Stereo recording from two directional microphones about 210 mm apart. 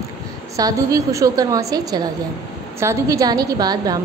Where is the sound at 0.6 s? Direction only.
15° right (ahead or behind).